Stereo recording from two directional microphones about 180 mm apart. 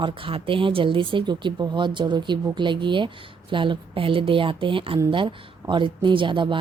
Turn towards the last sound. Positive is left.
turn(degrees=-25)  # may be behind; listen again after turning